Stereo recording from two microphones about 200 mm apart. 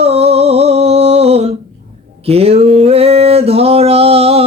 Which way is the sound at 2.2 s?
30° right (ahead or behind).